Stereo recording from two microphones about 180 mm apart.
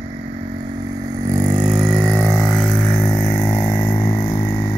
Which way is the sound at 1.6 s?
Centre (ahead or behind).